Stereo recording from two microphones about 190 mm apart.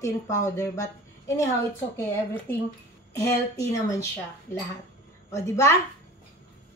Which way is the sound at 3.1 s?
15° left (ahead or behind).